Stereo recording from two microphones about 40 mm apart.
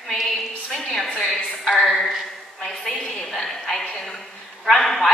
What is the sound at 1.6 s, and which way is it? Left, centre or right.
A man's voice, centre.